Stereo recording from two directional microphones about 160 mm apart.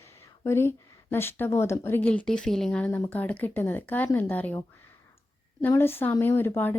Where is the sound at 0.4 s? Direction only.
15° left (ahead or behind).